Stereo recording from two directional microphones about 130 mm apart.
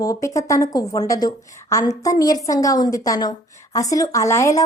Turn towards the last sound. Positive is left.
turn(degrees=25)  # may be behind; listen again after turning